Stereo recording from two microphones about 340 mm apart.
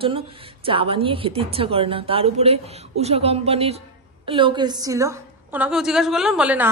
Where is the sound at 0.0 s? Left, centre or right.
Centre.